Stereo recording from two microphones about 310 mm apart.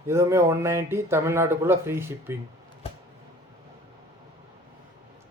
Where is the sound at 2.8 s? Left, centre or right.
Centre.